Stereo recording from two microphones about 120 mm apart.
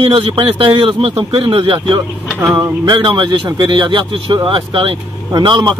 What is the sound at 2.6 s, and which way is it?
A man's voice, 40° right (ahead or behind).